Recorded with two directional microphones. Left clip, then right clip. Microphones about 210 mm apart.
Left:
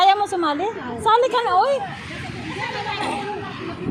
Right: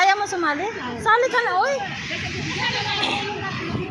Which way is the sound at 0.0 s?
20° left (ahead or behind).